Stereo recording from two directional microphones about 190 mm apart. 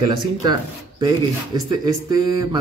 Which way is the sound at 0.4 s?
20° right (ahead or behind).